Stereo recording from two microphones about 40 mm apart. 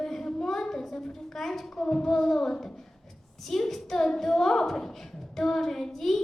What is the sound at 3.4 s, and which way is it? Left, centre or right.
A woman's voice, centre.